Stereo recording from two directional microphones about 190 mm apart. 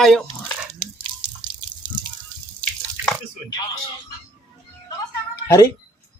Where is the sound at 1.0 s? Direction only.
25° right (ahead or behind).